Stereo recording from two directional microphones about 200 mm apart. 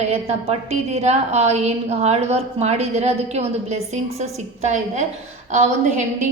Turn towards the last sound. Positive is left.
turn(degrees=-35)  # may be behind; listen again after turning